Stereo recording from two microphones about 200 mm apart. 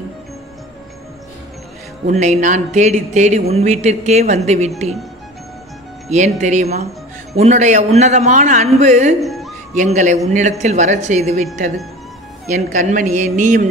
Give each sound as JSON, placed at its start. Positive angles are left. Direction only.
{"t": 2.0, "sound": "speech", "side_deg": -40}
{"t": 6.0, "sound": "speech", "side_deg": -35}
{"t": 9.2, "sound": "a sound", "side_deg": 0}
{"t": 9.8, "sound": "speech", "side_deg": -40}
{"t": 12.5, "sound": "speech", "side_deg": -40}